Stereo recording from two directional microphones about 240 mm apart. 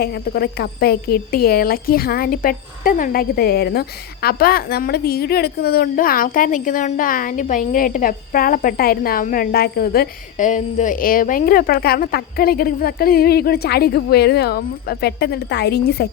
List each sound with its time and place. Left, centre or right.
0.0 s speech: left